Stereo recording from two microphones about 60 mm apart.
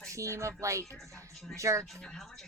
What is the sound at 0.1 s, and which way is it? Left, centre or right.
A woman's voice, right.